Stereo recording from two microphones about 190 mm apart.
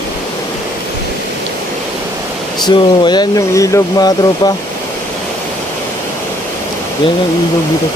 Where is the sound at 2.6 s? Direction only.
25° left (ahead or behind).